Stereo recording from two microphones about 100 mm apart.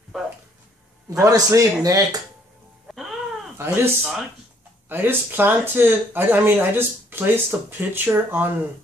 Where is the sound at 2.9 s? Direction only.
Centre (ahead or behind).